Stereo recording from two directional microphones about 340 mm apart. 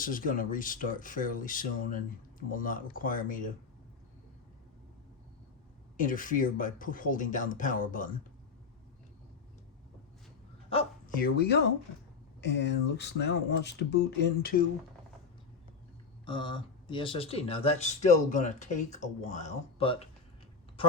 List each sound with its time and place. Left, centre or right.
0.0 s speech: left
6.0 s speech: left
10.7 s speech: centre
16.2 s speech: centre